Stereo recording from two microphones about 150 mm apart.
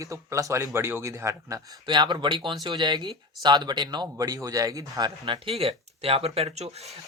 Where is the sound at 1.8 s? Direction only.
30° right (ahead or behind).